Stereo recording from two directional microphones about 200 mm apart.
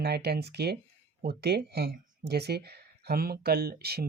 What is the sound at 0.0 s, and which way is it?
Speech, 55° right (ahead or behind).